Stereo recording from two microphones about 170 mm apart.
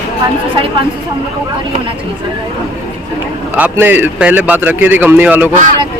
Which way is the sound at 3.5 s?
10° right (ahead or behind).